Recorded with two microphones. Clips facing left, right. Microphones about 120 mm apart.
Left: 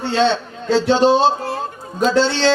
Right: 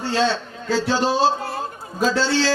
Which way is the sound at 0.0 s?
25° left (ahead or behind).